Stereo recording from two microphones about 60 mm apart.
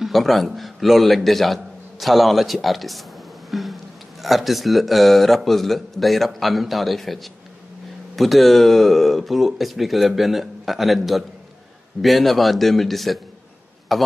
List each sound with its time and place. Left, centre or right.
0.0 s speech: centre
3.4 s a sound: centre
4.2 s speech: centre
8.2 s a man's voice: centre